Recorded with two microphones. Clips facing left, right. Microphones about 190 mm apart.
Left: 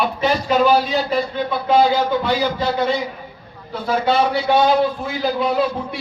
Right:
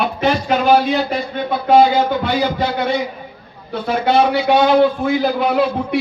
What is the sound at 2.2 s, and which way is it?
A man's voice, 65° right (ahead or behind).